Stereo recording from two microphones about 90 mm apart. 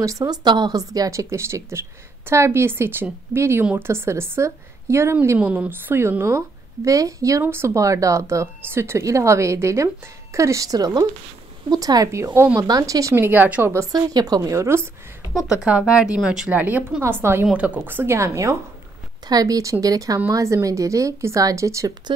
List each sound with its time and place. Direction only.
0.0 s a woman's voice: 40° right (ahead or behind)
1.2 s speech: 30° right (ahead or behind)
5.4 s speech: 15° right (ahead or behind); by 13.2 s 35° right (ahead or behind)
13.2 s speech: 20° right (ahead or behind)
13.7 s speech: 45° right (ahead or behind)
15.3 s speech: 10° right (ahead or behind)
17.0 s speech: 30° right (ahead or behind)
17.5 s speech: 15° right (ahead or behind); by 21.9 s 35° right (ahead or behind)